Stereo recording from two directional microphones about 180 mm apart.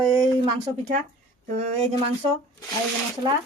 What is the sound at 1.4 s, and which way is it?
Speech, 45° right (ahead or behind).